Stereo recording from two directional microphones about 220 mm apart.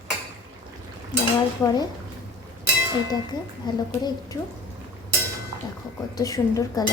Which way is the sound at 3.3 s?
20° left (ahead or behind).